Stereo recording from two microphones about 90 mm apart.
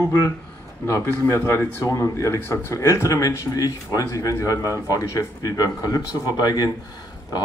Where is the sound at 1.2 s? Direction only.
30° left (ahead or behind); by 6.7 s 45° left (ahead or behind).